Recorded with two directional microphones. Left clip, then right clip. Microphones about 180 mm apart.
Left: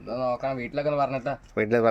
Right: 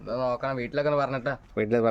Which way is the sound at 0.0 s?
25° right (ahead or behind).